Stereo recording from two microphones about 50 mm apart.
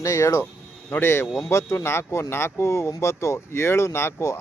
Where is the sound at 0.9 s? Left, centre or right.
Left.